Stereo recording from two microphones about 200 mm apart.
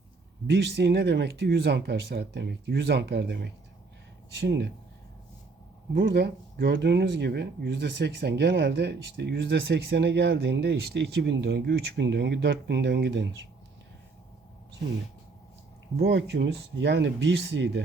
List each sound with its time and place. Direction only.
0.5 s speech: 55° right (ahead or behind)
5.9 s speech: 55° right (ahead or behind)
16.0 s speech: 60° right (ahead or behind)